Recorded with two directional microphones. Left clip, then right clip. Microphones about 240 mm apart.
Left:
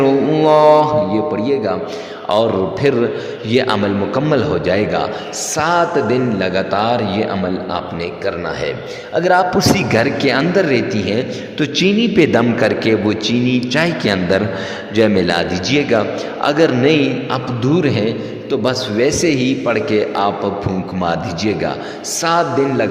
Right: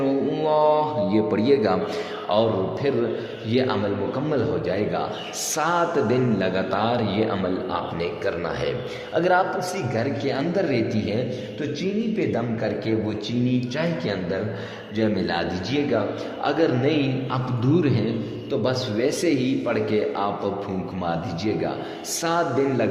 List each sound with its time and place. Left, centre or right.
0.0 s mantra: left
1.1 s speech: centre
2.3 s a man's voice: left
9.1 s a man's voice: left
9.6 s a man's voice: left